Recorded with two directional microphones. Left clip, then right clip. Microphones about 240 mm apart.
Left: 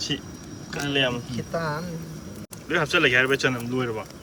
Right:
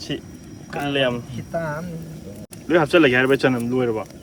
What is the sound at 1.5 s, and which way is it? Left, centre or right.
Speech, left.